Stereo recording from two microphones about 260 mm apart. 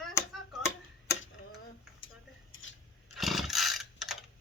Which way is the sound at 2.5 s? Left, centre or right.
Left.